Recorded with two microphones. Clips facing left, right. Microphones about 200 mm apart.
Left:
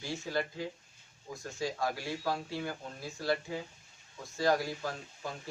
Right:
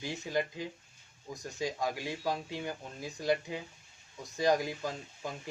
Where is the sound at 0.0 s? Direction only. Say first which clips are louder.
Right 1 dB; 15° right (ahead or behind).